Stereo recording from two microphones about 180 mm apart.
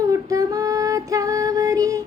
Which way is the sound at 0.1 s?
20° right (ahead or behind).